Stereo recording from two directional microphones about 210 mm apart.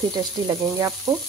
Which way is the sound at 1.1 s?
15° right (ahead or behind).